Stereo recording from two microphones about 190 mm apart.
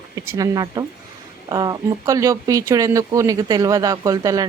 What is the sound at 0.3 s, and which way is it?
Speech, 20° right (ahead or behind).